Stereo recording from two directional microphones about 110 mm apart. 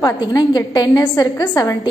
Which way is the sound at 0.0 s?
40° left (ahead or behind).